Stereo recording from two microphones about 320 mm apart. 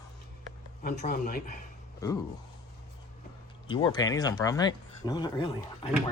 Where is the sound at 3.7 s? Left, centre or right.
Centre.